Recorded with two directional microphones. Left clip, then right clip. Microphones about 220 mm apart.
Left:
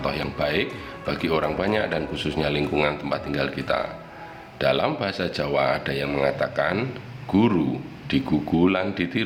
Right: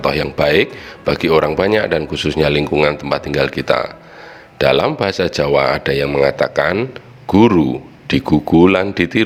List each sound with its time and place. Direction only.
0.0 s speech: 40° right (ahead or behind)